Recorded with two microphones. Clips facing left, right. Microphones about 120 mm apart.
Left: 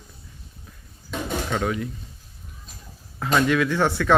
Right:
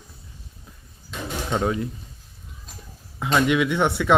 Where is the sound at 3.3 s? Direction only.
15° right (ahead or behind).